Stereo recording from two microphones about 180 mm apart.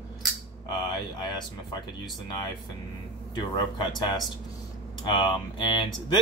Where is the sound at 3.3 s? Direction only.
25° left (ahead or behind).